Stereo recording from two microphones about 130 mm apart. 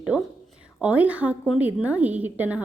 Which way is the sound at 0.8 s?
10° right (ahead or behind).